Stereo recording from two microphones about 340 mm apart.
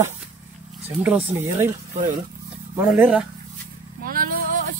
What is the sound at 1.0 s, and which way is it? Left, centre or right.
Speech, centre.